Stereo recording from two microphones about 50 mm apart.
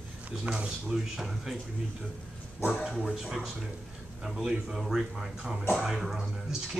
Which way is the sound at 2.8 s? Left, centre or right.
Centre.